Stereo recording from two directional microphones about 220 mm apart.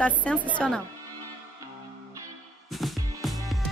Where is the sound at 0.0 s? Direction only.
5° left (ahead or behind).